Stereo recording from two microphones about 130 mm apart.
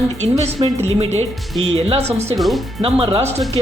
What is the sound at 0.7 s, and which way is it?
Speech, 55° right (ahead or behind).